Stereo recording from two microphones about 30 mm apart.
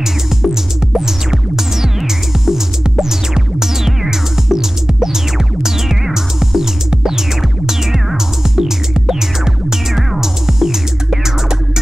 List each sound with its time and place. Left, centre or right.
0.4 s music: centre
8.5 s music: centre